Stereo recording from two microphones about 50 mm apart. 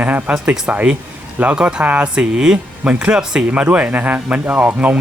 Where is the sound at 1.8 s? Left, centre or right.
Right.